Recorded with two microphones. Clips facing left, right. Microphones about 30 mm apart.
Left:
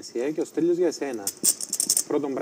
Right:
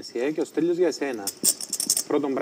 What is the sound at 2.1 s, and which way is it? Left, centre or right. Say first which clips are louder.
Speech: right 2 dB; right.